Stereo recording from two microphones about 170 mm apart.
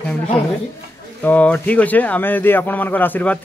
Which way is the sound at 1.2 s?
10° left (ahead or behind).